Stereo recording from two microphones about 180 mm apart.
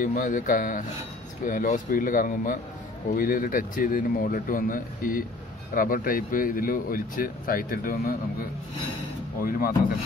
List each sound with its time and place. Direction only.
0.0 s speech: 45° left (ahead or behind)
9.4 s speech: 50° left (ahead or behind)